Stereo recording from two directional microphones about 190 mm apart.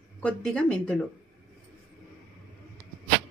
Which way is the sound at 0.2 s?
5° left (ahead or behind).